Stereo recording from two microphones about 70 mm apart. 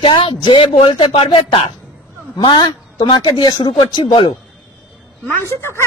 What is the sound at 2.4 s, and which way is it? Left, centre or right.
Speech, left.